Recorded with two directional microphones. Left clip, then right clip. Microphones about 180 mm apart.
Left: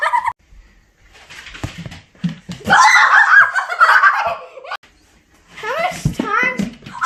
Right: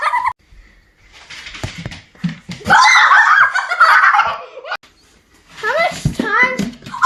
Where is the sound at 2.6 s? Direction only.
20° left (ahead or behind).